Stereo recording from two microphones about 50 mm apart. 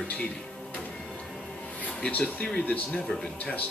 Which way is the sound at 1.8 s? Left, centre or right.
Left.